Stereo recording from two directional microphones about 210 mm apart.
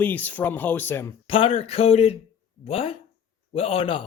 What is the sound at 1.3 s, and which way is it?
Speech, 25° left (ahead or behind).